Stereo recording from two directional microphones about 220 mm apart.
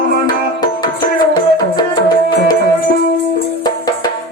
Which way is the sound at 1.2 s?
15° left (ahead or behind).